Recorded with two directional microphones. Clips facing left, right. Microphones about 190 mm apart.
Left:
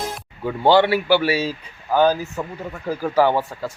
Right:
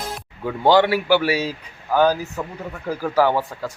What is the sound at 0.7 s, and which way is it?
Speech, 10° right (ahead or behind).